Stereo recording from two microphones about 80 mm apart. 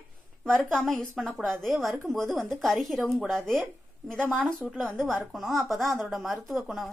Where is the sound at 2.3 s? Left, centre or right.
Centre.